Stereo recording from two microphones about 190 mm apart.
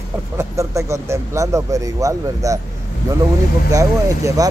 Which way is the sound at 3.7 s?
15° right (ahead or behind).